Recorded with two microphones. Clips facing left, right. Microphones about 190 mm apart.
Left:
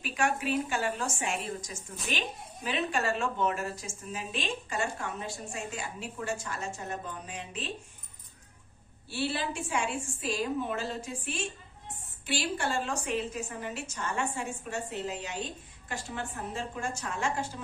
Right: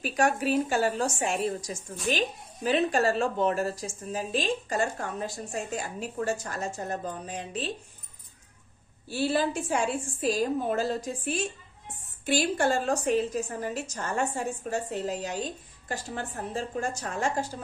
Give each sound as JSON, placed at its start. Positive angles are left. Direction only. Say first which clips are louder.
{"t": 0.0, "sound": "a woman's voice", "louder": "right 5 dB", "side_deg": -40}
{"t": 9.1, "sound": "a woman's voice", "louder": "right 6 dB", "side_deg": -40}